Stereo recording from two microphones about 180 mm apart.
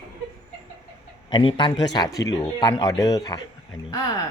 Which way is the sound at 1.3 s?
25° left (ahead or behind).